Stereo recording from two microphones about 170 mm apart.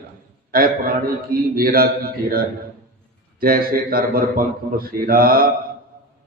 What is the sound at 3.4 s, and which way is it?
A man's voice, 60° right (ahead or behind).